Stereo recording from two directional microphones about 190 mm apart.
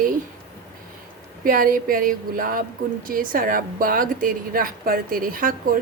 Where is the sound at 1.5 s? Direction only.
45° right (ahead or behind).